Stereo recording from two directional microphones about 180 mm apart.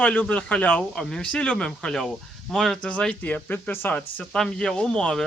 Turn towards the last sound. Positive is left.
turn(degrees=5)  # may be behind; listen again after turning